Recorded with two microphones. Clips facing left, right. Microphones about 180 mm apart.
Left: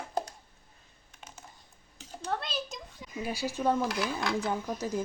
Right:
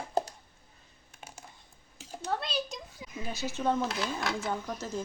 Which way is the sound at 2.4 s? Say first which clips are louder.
Right 2 dB; centre (ahead or behind).